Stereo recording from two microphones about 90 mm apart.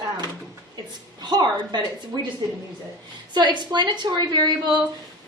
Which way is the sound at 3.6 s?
55° right (ahead or behind).